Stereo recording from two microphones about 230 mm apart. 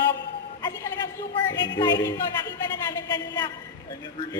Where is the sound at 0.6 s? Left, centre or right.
Centre.